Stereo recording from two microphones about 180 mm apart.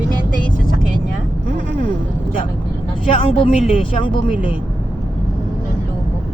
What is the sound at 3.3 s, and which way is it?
A woman's voice, 30° left (ahead or behind).